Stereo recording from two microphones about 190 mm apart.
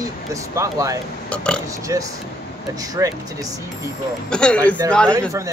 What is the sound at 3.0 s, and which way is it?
Speech, 15° right (ahead or behind).